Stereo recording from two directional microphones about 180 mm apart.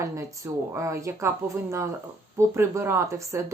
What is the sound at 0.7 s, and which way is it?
Speech, 15° right (ahead or behind).